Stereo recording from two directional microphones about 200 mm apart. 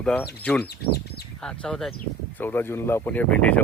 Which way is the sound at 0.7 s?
55° left (ahead or behind).